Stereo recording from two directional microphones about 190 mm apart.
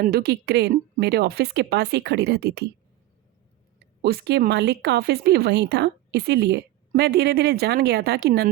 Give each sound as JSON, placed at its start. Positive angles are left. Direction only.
{"t": 0.0, "sound": "speech", "side_deg": -55}
{"t": 3.8, "sound": "speech", "side_deg": -55}